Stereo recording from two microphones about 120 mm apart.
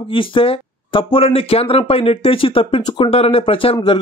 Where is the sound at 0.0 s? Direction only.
45° left (ahead or behind).